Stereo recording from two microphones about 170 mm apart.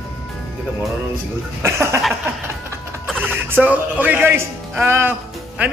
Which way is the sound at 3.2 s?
10° right (ahead or behind).